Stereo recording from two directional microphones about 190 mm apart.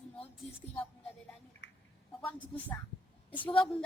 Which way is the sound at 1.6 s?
70° left (ahead or behind).